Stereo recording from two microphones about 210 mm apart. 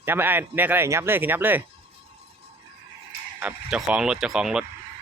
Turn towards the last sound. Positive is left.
turn(degrees=-5)  # may be behind; listen again after turning